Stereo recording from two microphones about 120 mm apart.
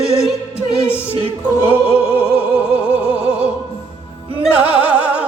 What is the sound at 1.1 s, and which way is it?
A capella, 50° right (ahead or behind).